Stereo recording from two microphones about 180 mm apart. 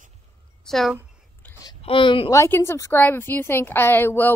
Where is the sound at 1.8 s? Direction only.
30° left (ahead or behind).